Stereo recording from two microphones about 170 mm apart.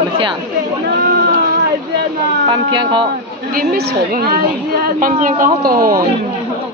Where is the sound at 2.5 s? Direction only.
30° right (ahead or behind).